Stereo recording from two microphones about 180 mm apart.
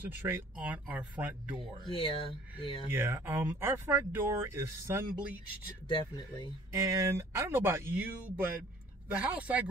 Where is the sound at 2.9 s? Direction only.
15° right (ahead or behind).